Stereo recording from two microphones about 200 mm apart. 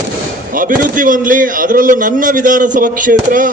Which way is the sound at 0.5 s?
45° right (ahead or behind).